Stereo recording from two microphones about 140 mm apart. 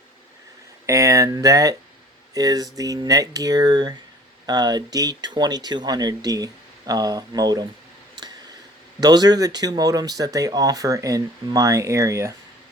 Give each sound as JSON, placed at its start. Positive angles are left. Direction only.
{"t": 0.9, "sound": "speech", "side_deg": -20}
{"t": 9.0, "sound": "speech", "side_deg": -30}